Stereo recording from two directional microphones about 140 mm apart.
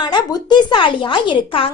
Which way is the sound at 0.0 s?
30° left (ahead or behind).